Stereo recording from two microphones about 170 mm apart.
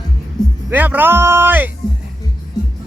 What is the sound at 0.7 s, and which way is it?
A man's voice, 10° right (ahead or behind).